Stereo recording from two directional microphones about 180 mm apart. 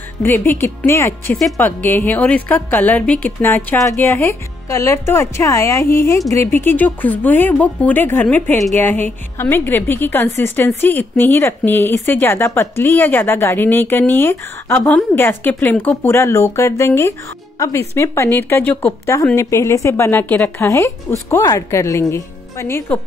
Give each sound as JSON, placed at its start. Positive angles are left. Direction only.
{"t": 0.2, "sound": "a woman's voice", "side_deg": 15}